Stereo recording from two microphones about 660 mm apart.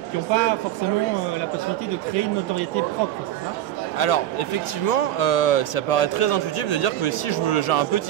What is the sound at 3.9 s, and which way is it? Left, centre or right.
A man's voice, left.